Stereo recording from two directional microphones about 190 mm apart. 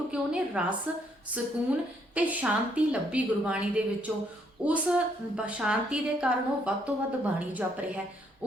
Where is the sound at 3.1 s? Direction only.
5° right (ahead or behind).